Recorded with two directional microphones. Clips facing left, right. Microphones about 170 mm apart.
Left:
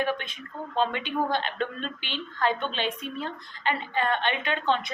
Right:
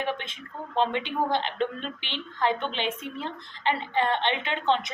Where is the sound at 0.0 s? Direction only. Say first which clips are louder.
Left 2 dB; 25° right (ahead or behind).